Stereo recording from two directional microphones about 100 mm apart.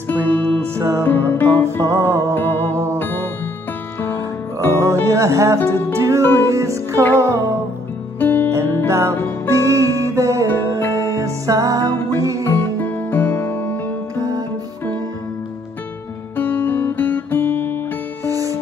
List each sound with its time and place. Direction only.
0.1 s music: 20° left (ahead or behind)
0.7 s music: 30° right (ahead or behind)
1.0 s music: 20° left (ahead or behind)
1.8 s music: 30° right (ahead or behind)
2.3 s music: 20° left (ahead or behind)
5.0 s music: 30° right (ahead or behind)
8.2 s music: 20° left (ahead or behind)
8.5 s music: 30° right (ahead or behind)
12.4 s music: 20° left (ahead or behind)
16.3 s guitar: 20° left (ahead or behind)
18.2 s music: 35° right (ahead or behind)